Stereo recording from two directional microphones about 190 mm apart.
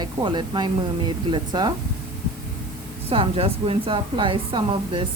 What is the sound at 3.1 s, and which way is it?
Speech, 30° right (ahead or behind).